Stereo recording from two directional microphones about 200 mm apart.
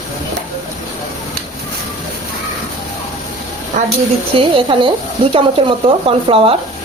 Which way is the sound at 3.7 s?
35° right (ahead or behind).